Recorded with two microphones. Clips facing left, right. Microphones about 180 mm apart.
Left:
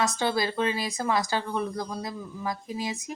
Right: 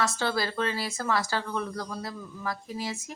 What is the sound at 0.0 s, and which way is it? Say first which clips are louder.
A woman's voice: left 2 dB; 20° left (ahead or behind).